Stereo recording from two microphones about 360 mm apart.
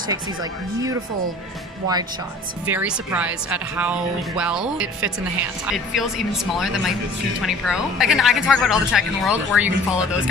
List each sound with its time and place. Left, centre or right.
0.1 s speech: centre
2.6 s speech: centre